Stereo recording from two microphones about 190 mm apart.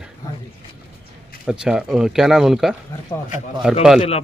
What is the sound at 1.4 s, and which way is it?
Speech, 5° right (ahead or behind).